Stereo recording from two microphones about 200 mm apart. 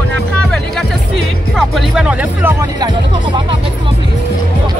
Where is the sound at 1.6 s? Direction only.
Centre (ahead or behind).